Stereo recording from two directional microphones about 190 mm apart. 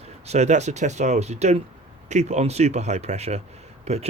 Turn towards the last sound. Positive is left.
turn(degrees=-35)  # may be behind; listen again after turning